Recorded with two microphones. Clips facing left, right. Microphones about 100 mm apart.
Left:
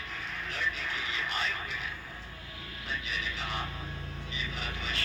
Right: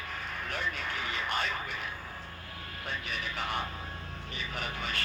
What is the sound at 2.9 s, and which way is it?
Speech, 50° right (ahead or behind).